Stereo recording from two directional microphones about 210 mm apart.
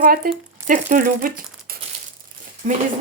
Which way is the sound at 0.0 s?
40° right (ahead or behind).